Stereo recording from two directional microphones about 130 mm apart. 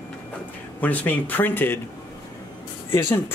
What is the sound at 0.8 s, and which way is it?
Speech, 10° left (ahead or behind).